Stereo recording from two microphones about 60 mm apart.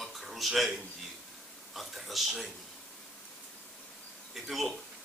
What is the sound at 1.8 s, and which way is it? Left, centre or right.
Speech, centre.